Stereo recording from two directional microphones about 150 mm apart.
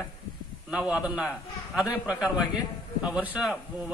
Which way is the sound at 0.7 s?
5° right (ahead or behind).